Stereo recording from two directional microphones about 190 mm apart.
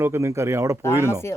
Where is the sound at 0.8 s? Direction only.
15° left (ahead or behind).